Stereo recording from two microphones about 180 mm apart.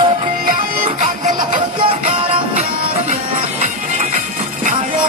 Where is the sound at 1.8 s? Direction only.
30° right (ahead or behind).